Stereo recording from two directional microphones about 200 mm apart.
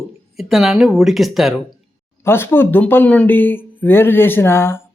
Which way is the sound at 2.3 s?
10° left (ahead or behind).